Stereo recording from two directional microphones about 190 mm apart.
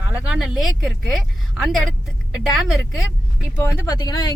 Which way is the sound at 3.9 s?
20° left (ahead or behind).